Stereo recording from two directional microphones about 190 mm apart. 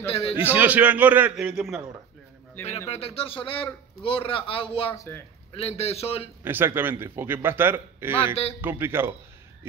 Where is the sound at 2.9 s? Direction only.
30° left (ahead or behind).